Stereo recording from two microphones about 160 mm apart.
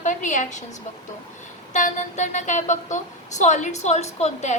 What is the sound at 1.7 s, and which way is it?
A woman's voice, 50° left (ahead or behind).